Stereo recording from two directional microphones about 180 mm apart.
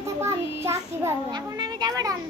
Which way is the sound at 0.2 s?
15° right (ahead or behind).